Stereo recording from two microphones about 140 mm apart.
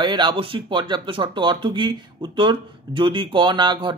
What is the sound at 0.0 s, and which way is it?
Speech, 35° right (ahead or behind).